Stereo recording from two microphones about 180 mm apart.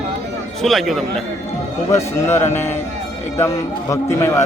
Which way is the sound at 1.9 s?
15° left (ahead or behind).